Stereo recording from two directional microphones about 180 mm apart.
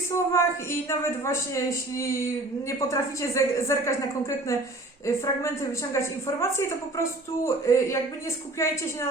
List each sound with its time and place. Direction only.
0.1 s a woman's voice: 15° left (ahead or behind)
6.6 s a woman's voice: 15° left (ahead or behind)